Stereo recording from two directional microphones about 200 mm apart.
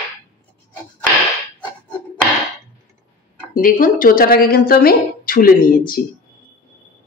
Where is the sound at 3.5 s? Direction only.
45° left (ahead or behind).